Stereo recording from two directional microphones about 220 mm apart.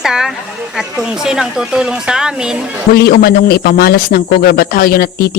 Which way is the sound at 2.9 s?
45° left (ahead or behind).